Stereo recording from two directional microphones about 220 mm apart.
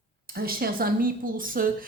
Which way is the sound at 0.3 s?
45° right (ahead or behind).